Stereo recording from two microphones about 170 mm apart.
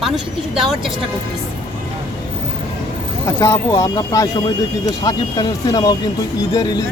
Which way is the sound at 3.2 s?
20° left (ahead or behind).